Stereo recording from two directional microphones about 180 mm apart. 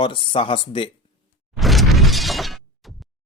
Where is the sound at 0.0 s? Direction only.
30° left (ahead or behind).